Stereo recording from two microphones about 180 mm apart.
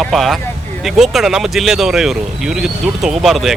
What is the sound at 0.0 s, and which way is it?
Speech, centre (ahead or behind).